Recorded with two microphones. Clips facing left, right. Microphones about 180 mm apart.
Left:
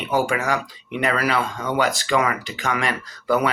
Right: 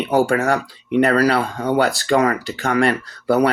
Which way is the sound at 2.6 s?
55° right (ahead or behind).